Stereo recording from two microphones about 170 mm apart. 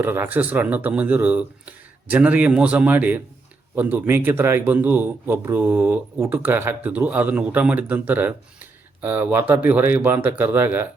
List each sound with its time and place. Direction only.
0.0 s speech: 10° right (ahead or behind)